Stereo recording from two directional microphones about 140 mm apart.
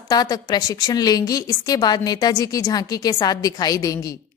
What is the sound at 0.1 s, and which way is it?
A woman's voice, 30° left (ahead or behind).